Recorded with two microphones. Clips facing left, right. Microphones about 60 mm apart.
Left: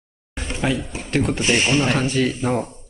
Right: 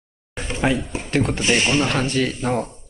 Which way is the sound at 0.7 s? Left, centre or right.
Centre.